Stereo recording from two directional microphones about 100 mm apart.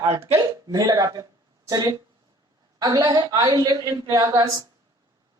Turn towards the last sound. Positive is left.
turn(degrees=-30)  # may be behind; listen again after turning